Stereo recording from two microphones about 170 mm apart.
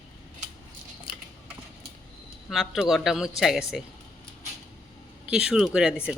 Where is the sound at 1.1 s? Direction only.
30° left (ahead or behind).